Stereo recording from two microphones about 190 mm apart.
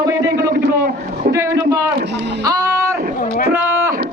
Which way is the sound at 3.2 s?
50° left (ahead or behind).